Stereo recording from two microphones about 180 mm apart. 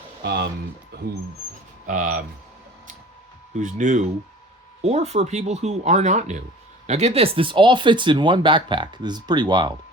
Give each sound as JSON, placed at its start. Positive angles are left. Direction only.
{"t": 0.2, "sound": "speech", "side_deg": -70}
{"t": 1.9, "sound": "speech", "side_deg": -45}
{"t": 3.5, "sound": "speech", "side_deg": -45}